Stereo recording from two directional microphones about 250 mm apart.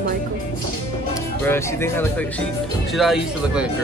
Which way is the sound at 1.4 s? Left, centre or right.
Centre.